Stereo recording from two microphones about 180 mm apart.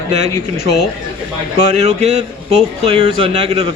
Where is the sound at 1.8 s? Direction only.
35° right (ahead or behind).